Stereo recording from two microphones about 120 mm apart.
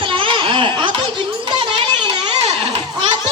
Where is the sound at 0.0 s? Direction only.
45° right (ahead or behind).